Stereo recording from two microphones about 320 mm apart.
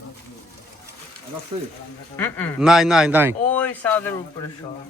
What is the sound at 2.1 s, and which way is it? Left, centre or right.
Speech, centre.